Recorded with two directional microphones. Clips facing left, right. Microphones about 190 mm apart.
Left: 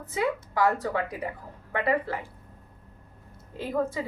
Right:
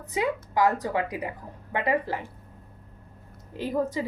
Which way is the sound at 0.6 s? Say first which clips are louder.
Right 1 dB; 15° right (ahead or behind).